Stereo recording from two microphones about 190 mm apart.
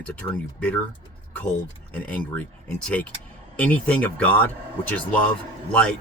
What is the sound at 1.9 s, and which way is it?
A man's voice, 5° left (ahead or behind).